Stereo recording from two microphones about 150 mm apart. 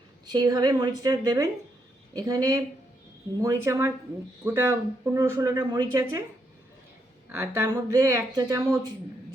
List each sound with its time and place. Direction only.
0.3 s a woman's voice: 25° right (ahead or behind)
7.3 s a woman's voice: 20° right (ahead or behind)